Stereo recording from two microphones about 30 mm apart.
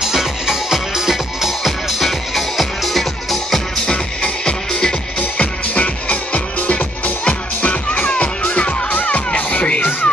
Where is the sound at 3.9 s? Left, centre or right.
Left.